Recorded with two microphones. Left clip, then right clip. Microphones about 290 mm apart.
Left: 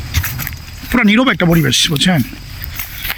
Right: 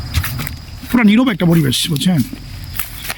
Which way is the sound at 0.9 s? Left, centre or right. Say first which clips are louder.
Left 2 dB; centre.